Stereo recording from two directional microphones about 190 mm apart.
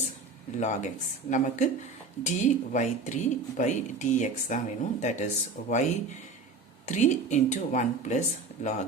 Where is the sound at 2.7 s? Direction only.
40° left (ahead or behind).